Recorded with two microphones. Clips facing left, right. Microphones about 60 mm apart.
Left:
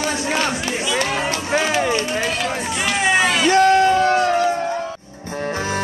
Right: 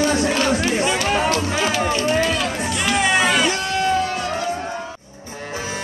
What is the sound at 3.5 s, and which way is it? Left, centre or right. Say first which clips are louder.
Music: left 7 dB; left.